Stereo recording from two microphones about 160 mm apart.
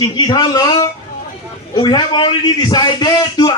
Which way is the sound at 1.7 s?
30° left (ahead or behind).